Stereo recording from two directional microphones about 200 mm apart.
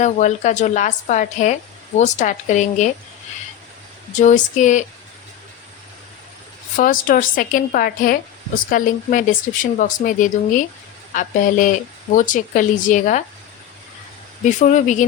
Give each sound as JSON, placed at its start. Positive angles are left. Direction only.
{"t": 0.0, "sound": "a woman's voice", "side_deg": 35}
{"t": 4.2, "sound": "a woman's voice", "side_deg": 40}
{"t": 6.7, "sound": "a woman's voice", "side_deg": 45}
{"t": 14.6, "sound": "a woman's voice", "side_deg": 40}